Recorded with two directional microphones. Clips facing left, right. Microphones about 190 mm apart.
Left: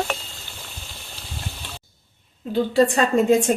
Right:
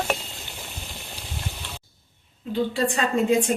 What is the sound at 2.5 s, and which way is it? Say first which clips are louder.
A woman's voice: left 6 dB; 45° left (ahead or behind).